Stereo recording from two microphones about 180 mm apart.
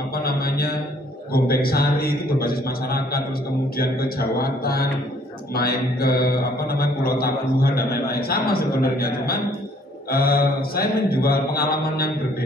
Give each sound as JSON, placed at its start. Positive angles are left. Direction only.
{"t": 0.1, "sound": "mantra", "side_deg": 60}
{"t": 1.3, "sound": "a man's voice", "side_deg": 60}